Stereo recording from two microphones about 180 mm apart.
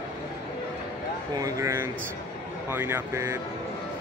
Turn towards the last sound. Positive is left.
turn(degrees=-15)  # may be behind; listen again after turning